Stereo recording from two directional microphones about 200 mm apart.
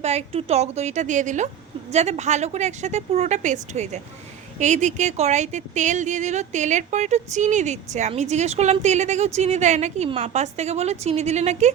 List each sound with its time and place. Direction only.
0.0 s speech: 35° right (ahead or behind)